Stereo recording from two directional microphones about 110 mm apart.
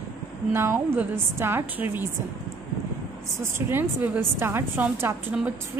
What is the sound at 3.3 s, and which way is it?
A woman's voice, 20° right (ahead or behind).